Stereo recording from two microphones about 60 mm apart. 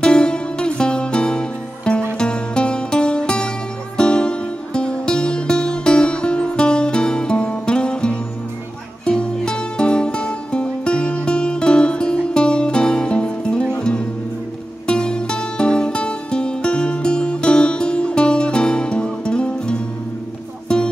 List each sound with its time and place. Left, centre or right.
0.0 s music: centre